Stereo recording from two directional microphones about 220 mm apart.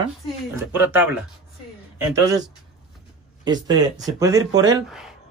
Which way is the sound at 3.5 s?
15° right (ahead or behind).